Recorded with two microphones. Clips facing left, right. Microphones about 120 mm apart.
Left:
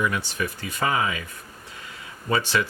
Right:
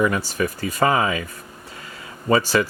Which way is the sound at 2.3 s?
45° right (ahead or behind).